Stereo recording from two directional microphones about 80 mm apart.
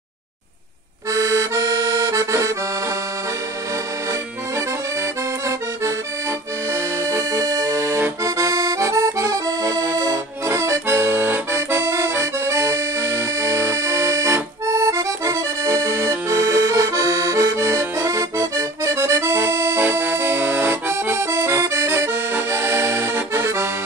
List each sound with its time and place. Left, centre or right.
1.1 s accordion: right
6.7 s accordion: right
19.8 s accordion: right